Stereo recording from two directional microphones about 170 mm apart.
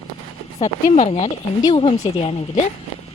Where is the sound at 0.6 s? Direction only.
40° left (ahead or behind).